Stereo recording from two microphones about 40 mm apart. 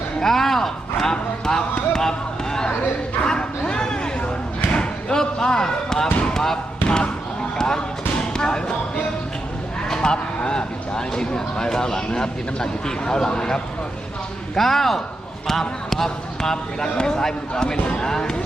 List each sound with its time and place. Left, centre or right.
0.2 s a sound: centre
1.1 s speech: centre
1.9 s basketball bounce: centre
3.7 s a sound: left
4.7 s basketball bounce: left
6.8 s basketball bounce: left
9.9 s speech: centre